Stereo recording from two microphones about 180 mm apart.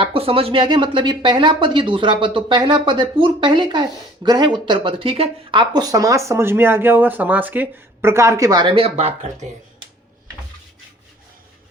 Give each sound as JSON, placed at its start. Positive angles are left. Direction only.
{"t": 0.0, "sound": "speech", "side_deg": -30}